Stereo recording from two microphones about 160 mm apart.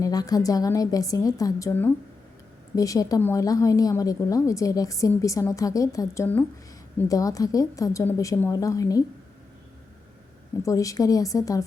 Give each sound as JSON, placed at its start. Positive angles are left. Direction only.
{"t": 0.0, "sound": "a woman's voice", "side_deg": 25}
{"t": 10.6, "sound": "a woman's voice", "side_deg": 20}